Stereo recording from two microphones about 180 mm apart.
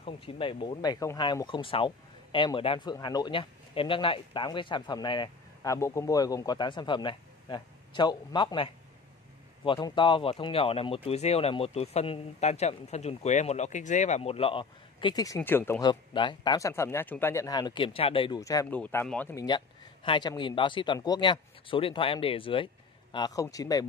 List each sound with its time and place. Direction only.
0.0 s speech: 30° left (ahead or behind); by 15.9 s 15° left (ahead or behind)
15.9 s speech: 25° left (ahead or behind)
18.4 s speech: 20° left (ahead or behind)
19.3 s speech: 25° left (ahead or behind)